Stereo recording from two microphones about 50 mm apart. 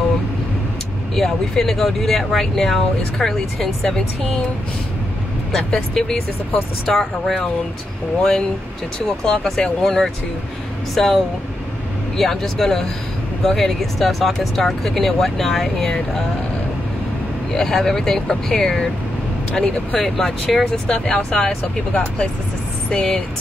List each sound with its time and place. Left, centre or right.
1.1 s speech: centre
5.9 s speech: centre
17.5 s speech: centre
20.0 s speech: centre